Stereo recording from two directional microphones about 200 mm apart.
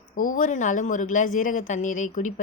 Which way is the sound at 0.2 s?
40° left (ahead or behind).